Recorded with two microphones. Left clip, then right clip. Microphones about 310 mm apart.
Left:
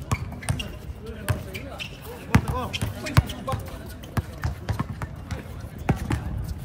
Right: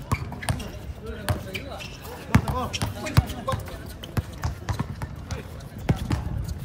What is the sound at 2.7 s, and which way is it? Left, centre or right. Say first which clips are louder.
Basketball bounce: right 1 dB; left.